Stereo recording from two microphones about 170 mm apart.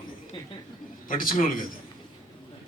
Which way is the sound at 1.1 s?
55° left (ahead or behind).